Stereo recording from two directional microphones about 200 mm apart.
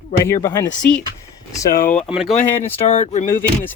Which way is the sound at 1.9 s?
Centre (ahead or behind).